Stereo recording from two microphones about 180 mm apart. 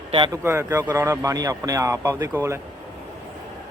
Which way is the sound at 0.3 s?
15° right (ahead or behind).